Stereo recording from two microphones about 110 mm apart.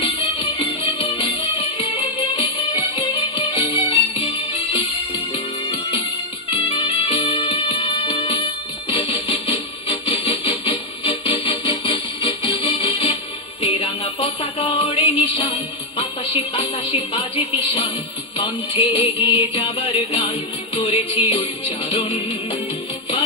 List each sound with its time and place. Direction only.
0.0 s music: 50° left (ahead or behind)
6.5 s music: 50° left (ahead or behind)